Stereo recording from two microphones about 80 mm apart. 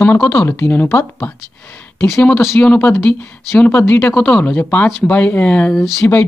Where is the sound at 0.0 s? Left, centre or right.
Left.